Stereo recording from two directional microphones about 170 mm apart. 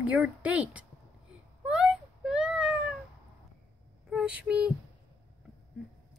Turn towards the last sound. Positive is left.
turn(degrees=-5)  # may be behind; listen again after turning